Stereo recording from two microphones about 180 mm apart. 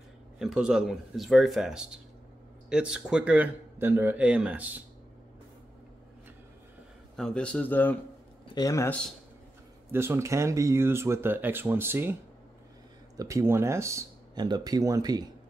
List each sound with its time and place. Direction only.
0.4 s speech: 5° right (ahead or behind)
7.2 s speech: 5° left (ahead or behind)
9.8 s speech: 15° right (ahead or behind)
13.2 s speech: 15° right (ahead or behind)